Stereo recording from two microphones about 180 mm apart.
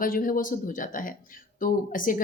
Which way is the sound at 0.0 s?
50° left (ahead or behind).